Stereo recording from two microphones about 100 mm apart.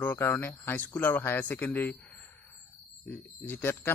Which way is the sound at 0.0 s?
20° left (ahead or behind).